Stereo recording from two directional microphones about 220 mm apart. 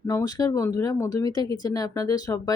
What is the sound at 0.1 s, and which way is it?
Speech, 15° left (ahead or behind).